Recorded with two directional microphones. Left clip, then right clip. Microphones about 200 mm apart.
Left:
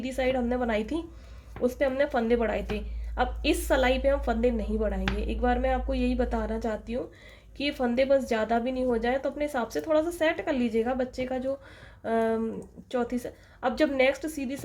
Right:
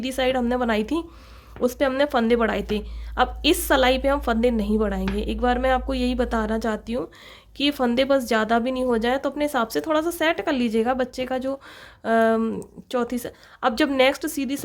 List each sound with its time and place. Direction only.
0.0 s a woman's voice: 35° right (ahead or behind)